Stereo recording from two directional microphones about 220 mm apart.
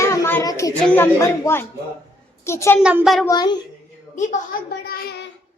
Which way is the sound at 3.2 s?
20° left (ahead or behind).